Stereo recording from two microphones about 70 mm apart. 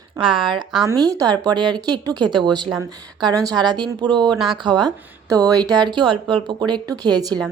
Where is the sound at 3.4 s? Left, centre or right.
Right.